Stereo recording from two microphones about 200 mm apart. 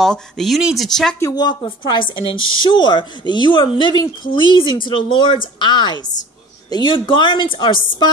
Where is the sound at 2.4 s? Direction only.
80° left.